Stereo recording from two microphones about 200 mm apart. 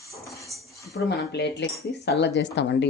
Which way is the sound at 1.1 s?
60° left (ahead or behind).